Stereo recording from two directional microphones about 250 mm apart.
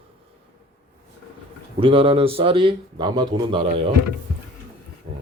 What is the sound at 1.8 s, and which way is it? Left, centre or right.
Speech, right.